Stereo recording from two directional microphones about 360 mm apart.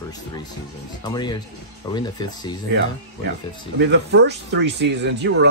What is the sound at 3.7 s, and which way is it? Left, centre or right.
Speech, right.